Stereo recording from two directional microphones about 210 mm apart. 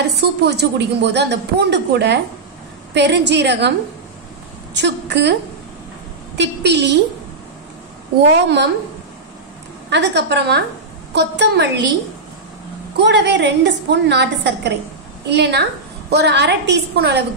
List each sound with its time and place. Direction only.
0.1 s a woman's voice: 50° right (ahead or behind)
4.7 s a woman's voice: 55° right (ahead or behind)
6.3 s a woman's voice: 55° right (ahead or behind)
9.8 s a woman's voice: 55° right (ahead or behind)
12.9 s a woman's voice: 55° right (ahead or behind)